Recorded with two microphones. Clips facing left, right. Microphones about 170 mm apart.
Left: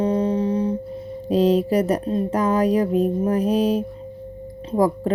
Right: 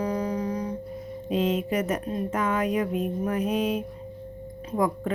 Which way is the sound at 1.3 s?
35° left (ahead or behind).